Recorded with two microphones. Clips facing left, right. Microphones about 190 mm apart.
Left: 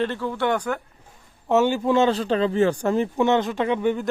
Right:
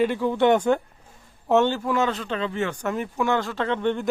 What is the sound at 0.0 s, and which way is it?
Speech, 15° right (ahead or behind).